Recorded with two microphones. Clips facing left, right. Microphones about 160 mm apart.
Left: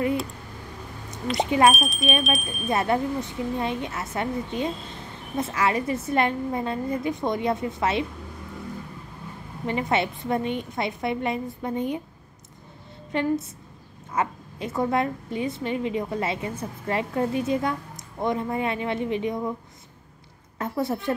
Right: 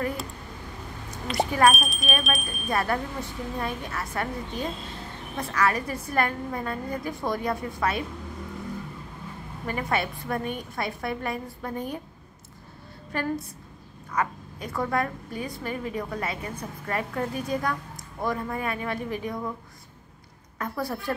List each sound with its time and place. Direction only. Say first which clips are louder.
1.4 s a woman's voice: left 2 dB; 20° left (ahead or behind)
1.7 s speech: left 3 dB; centre (ahead or behind)
2.7 s a woman's voice: left 4 dB; 20° left (ahead or behind)
9.7 s a woman's voice: left 3 dB; 25° left (ahead or behind)
13.1 s a woman's voice: left 5 dB; 25° left (ahead or behind)
20.5 s a woman's voice: left 4 dB; 25° left (ahead or behind)